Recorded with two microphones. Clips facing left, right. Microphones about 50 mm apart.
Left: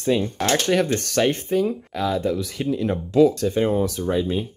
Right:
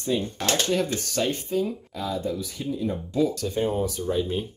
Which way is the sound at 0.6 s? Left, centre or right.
Left.